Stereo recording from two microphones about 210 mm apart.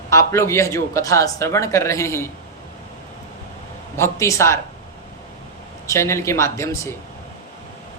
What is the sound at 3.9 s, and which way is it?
Speech, 15° left (ahead or behind).